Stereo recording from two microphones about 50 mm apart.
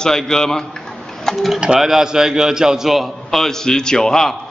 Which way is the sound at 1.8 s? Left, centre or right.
Centre.